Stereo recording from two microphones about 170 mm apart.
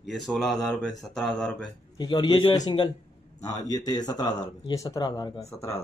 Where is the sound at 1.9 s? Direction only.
25° left (ahead or behind).